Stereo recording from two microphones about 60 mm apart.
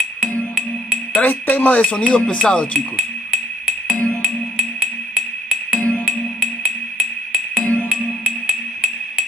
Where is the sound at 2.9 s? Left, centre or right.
Centre.